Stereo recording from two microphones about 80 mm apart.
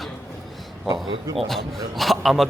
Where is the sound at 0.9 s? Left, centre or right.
Right.